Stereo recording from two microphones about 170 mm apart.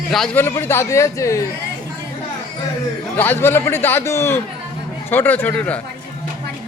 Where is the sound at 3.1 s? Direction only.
10° left (ahead or behind).